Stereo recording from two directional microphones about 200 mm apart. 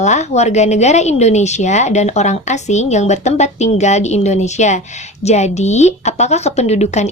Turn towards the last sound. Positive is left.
turn(degrees=35)  # may be behind; listen again after turning